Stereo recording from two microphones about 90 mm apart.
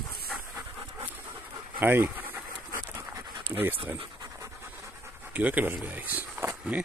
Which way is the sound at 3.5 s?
20° right (ahead or behind).